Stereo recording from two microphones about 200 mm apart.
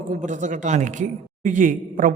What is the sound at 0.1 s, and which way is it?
A man's voice, 40° right (ahead or behind).